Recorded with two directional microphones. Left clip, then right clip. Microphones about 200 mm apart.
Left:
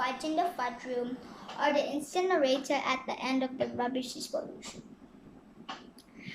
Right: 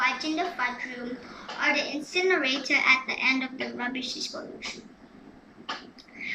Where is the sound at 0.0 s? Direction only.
30° left (ahead or behind).